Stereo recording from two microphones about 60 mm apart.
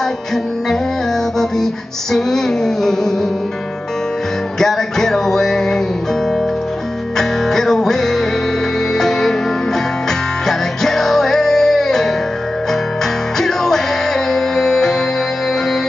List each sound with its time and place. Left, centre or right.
2.1 s child singing: centre
4.6 s music: centre
7.2 s music: centre
10.4 s music: centre
13.4 s music: centre